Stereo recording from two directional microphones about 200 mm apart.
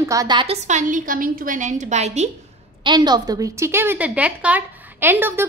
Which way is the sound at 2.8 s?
20° right (ahead or behind).